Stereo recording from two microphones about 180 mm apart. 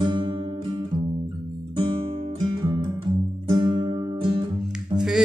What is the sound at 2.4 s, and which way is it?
Music, 25° right (ahead or behind).